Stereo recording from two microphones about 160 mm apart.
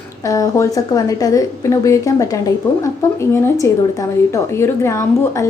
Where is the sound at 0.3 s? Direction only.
20° left (ahead or behind).